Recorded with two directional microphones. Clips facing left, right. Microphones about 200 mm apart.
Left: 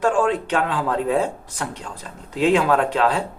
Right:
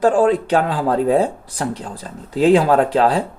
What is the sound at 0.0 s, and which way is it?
Speech, 35° right (ahead or behind).